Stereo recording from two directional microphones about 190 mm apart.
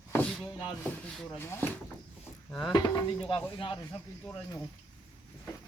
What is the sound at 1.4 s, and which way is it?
Speech, 10° left (ahead or behind).